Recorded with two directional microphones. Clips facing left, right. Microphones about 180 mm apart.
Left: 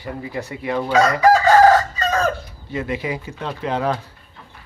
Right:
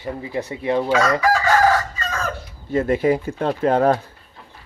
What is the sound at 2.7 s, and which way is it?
Speech, 45° right (ahead or behind).